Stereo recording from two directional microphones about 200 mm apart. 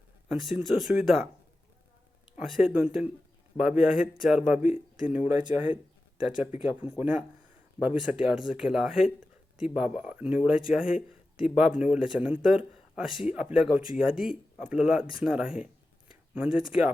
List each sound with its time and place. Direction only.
0.3 s speech: centre (ahead or behind)
2.4 s speech: 5° right (ahead or behind)